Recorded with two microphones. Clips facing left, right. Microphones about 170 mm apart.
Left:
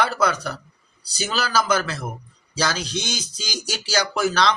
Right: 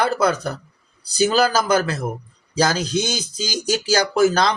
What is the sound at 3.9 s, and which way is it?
Speech, 45° right (ahead or behind).